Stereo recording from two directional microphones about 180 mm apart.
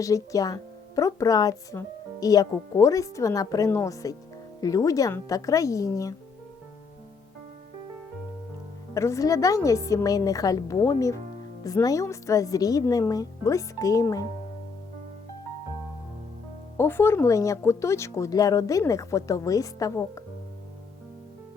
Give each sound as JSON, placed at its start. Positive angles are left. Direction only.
{"t": 0.0, "sound": "a woman's voice", "side_deg": 20}
{"t": 9.0, "sound": "a woman's voice", "side_deg": 15}
{"t": 16.7, "sound": "speech", "side_deg": 15}